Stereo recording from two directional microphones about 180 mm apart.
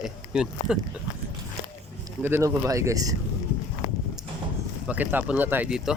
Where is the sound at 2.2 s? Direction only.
15° right (ahead or behind).